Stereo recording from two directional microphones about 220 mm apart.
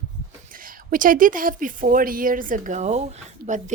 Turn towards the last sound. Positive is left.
turn(degrees=-30)  # may be behind; listen again after turning